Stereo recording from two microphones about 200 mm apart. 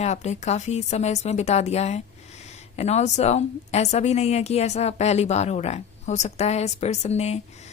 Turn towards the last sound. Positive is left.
turn(degrees=30)  # may be behind; listen again after turning